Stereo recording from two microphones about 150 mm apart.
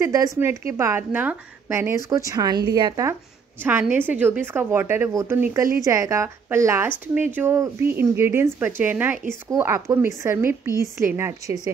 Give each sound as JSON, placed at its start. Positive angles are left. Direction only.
{"t": 0.0, "sound": "a woman's voice", "side_deg": -20}
{"t": 3.6, "sound": "a woman's voice", "side_deg": -15}